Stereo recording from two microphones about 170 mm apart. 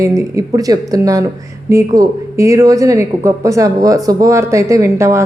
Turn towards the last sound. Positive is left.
turn(degrees=-15)  # may be behind; listen again after turning